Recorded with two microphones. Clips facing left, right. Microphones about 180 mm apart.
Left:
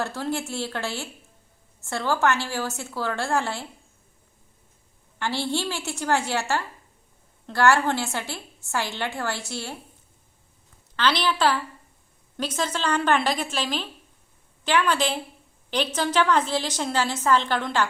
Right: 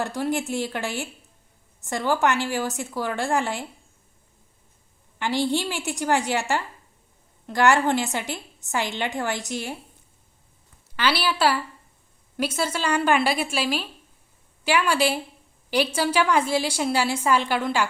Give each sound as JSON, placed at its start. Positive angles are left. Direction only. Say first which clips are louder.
{"t": 0.0, "sound": "a woman's voice", "louder": "right 2 dB", "side_deg": -15}
{"t": 5.2, "sound": "a woman's voice", "louder": "right 3 dB", "side_deg": -15}
{"t": 10.9, "sound": "a woman's voice", "louder": "even", "side_deg": -10}